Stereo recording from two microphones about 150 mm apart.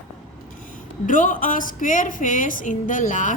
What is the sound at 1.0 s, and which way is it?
A woman's voice, 60° left (ahead or behind).